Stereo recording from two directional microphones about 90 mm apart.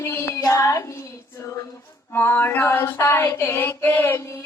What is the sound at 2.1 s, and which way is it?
Female singing, 20° left (ahead or behind).